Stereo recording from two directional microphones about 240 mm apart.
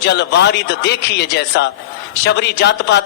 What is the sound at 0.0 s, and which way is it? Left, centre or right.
A man's voice, left.